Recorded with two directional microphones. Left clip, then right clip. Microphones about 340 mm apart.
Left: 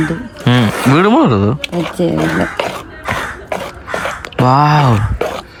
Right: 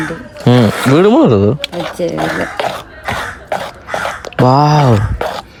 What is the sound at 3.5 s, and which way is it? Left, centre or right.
Cough, right.